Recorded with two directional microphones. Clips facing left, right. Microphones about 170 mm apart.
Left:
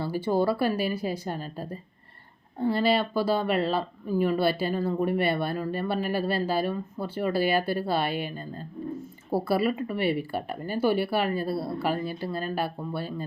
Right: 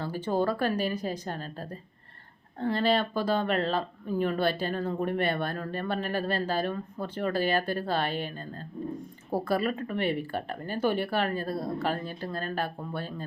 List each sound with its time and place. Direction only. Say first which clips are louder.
0.0 s speech: left 3 dB; 10° left (ahead or behind)